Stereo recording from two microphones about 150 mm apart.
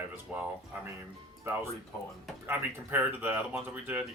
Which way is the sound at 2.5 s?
15° right (ahead or behind).